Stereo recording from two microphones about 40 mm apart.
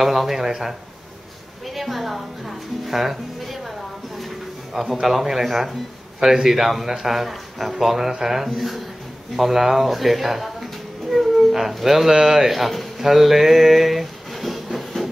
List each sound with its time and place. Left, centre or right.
0.0 s a man's voice: centre
5.0 s a man's voice: centre